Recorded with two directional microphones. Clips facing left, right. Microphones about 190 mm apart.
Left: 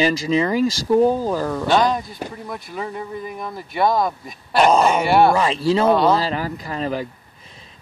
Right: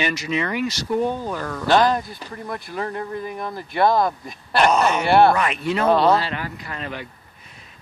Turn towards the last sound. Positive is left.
turn(degrees=35)  # may be behind; listen again after turning